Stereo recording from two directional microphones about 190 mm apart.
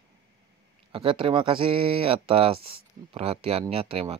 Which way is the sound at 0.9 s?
25° right (ahead or behind).